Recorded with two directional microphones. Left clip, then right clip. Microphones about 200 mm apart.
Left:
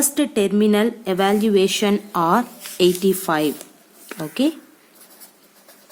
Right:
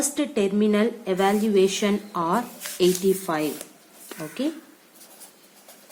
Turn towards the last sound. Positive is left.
turn(degrees=60)  # may be behind; listen again after turning